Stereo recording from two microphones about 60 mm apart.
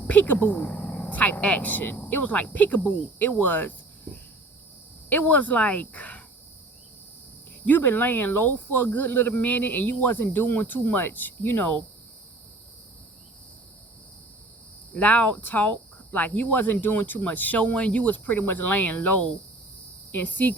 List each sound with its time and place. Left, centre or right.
0.1 s speech: left
3.4 s cricket: left
5.0 s speech: left
7.7 s speech: left
14.9 s speech: left